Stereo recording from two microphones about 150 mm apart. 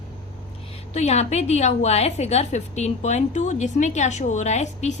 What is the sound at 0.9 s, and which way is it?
A woman's voice, 45° left (ahead or behind).